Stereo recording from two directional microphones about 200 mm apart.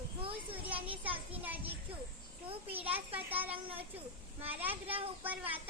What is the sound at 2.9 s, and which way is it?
A child's voice, 10° right (ahead or behind).